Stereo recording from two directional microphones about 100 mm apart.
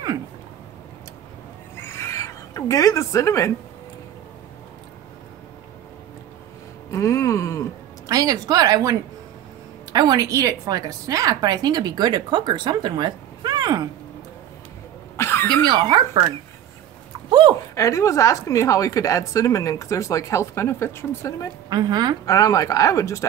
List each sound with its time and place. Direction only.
1.8 s a sound: 25° left (ahead or behind)
6.9 s speech: 30° left (ahead or behind)
8.1 s a woman's voice: 35° right (ahead or behind)
9.9 s a woman's voice: 40° right (ahead or behind)
15.1 s cough: 25° left (ahead or behind)
15.6 s speech: 45° right (ahead or behind)
17.3 s a sound: 45° right (ahead or behind)
17.7 s speech: 30° left (ahead or behind)
21.6 s speech: 45° right (ahead or behind)
22.2 s speech: 35° left (ahead or behind)